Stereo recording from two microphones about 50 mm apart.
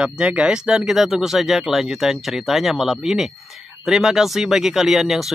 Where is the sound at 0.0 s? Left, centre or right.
Right.